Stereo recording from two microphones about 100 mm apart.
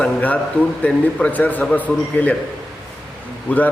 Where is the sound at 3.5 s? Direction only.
15° left (ahead or behind).